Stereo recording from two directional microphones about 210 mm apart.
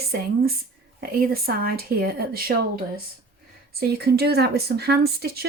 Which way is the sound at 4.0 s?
50° right (ahead or behind).